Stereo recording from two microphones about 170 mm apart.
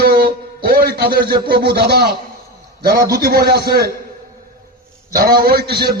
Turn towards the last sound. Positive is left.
turn(degrees=-65)  # may be behind; listen again after turning